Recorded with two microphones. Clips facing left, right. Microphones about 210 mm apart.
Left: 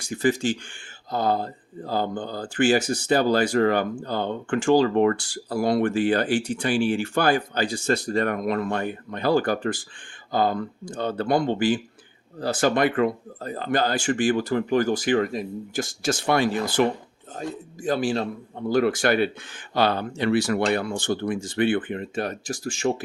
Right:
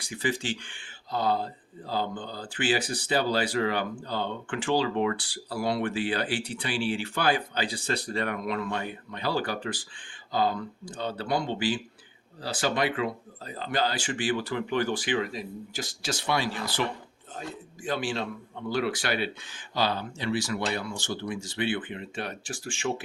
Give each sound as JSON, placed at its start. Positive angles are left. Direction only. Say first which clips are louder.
{"t": 0.0, "sound": "speech", "louder": "left 8 dB", "side_deg": 45}
{"t": 17.8, "sound": "speech", "louder": "left 6 dB", "side_deg": 40}